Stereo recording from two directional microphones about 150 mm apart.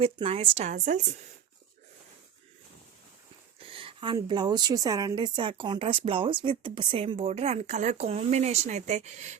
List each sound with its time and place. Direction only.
0.0 s a woman's voice: 40° right (ahead or behind); by 1.0 s 55° right (ahead or behind)
3.6 s a woman's voice: 35° right (ahead or behind)